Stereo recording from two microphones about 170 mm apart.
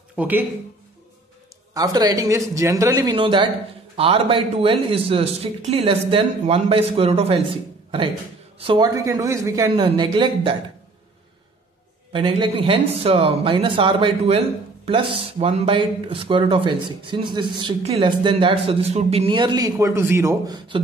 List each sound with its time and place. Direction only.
0.1 s speech: 10° right (ahead or behind)
1.7 s a man's voice: 20° right (ahead or behind)
8.5 s speech: 30° right (ahead or behind)
12.1 s a man's voice: 30° right (ahead or behind)